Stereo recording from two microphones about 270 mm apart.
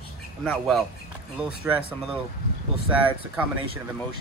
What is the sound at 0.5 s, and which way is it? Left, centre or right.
Speech, centre.